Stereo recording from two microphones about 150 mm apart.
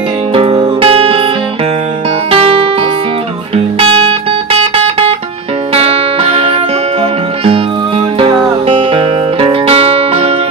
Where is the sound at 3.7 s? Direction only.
35° right (ahead or behind).